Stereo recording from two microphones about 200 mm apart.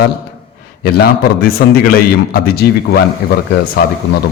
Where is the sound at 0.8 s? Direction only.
50° left (ahead or behind).